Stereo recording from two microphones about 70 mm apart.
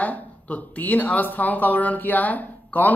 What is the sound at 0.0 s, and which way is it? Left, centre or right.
A man's voice, left.